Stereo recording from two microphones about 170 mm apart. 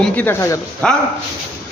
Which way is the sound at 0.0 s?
10° left (ahead or behind).